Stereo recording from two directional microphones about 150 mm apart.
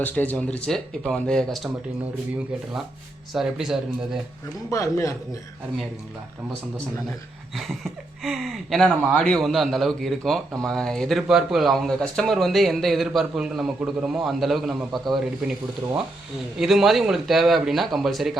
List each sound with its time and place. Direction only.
0.0 s speech: 10° left (ahead or behind)
3.3 s speech: 5° right (ahead or behind)
4.7 s a man's voice: 20° left (ahead or behind)
7.5 s speech: centre (ahead or behind)
16.6 s speech: centre (ahead or behind)